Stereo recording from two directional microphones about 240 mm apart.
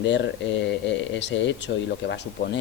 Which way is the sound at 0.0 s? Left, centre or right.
Left.